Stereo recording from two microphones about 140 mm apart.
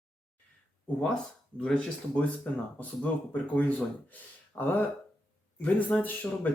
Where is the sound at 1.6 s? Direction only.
5° left (ahead or behind).